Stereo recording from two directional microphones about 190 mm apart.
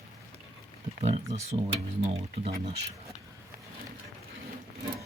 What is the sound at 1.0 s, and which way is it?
Speech, 35° right (ahead or behind).